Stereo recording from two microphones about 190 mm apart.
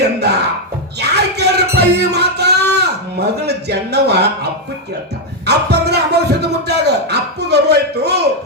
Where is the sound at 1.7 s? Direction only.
60° right (ahead or behind).